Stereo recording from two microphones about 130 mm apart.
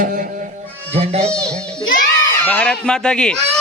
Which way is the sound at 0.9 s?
50° right (ahead or behind).